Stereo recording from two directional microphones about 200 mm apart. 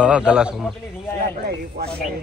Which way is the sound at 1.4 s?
50° right (ahead or behind).